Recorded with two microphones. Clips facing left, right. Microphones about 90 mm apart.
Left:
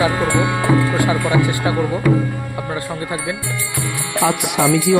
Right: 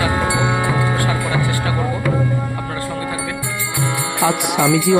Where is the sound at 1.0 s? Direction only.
20° left (ahead or behind).